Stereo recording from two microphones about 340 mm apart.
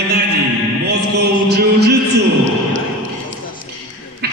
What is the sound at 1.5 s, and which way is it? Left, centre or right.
Chant, right.